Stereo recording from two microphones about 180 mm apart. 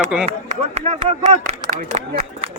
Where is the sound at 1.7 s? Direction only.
50° right (ahead or behind).